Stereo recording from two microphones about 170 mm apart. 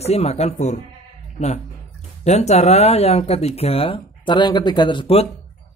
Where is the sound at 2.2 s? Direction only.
40° left (ahead or behind).